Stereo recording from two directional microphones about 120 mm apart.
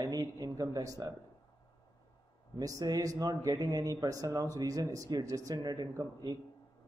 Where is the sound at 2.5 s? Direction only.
30° right (ahead or behind).